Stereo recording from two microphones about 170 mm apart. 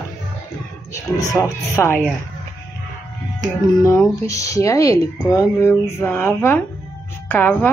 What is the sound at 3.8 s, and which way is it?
A woman's voice, 15° left (ahead or behind).